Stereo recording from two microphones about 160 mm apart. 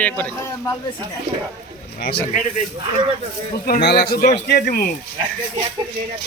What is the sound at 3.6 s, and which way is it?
A man's voice, 80° left.